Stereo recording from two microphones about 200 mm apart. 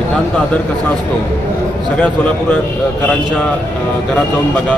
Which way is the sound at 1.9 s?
5° left (ahead or behind).